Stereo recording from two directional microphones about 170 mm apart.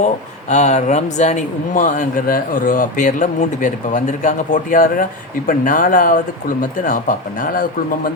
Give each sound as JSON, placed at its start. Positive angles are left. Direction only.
{"t": 0.0, "sound": "speech", "side_deg": 45}